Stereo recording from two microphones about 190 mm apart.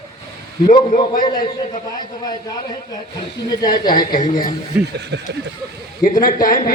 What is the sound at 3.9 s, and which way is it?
Speech, 45° left (ahead or behind).